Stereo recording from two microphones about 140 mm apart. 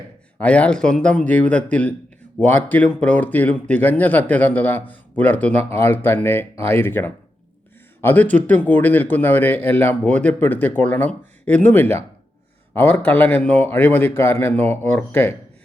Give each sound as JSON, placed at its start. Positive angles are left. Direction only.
{"t": 0.3, "sound": "speech", "side_deg": 10}